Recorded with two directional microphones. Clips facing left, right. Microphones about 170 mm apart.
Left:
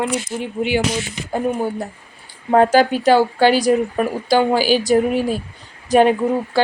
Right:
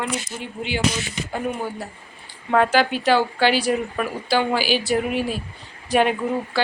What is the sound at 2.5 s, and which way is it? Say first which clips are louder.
Speech: left 5 dB; 40° left (ahead or behind).